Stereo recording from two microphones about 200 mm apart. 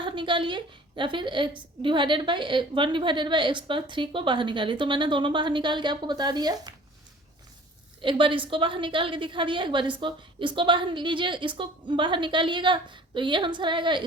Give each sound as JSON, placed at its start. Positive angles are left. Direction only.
{"t": 0.0, "sound": "a woman's voice", "side_deg": -25}
{"t": 8.0, "sound": "a woman's voice", "side_deg": -25}